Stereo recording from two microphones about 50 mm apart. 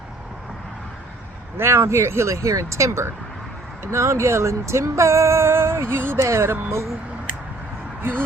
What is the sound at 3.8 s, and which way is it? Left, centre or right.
Speech, right.